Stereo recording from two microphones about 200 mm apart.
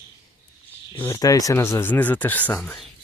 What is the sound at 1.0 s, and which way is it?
Speech, 15° left (ahead or behind).